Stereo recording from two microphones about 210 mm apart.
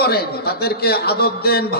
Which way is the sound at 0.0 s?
50° left (ahead or behind).